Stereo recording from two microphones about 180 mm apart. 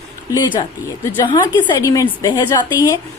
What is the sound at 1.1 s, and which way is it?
A woman's voice, 20° left (ahead or behind).